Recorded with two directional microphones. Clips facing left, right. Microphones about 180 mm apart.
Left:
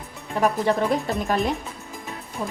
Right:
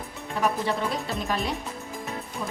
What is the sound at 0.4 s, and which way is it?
Speech, 45° left (ahead or behind).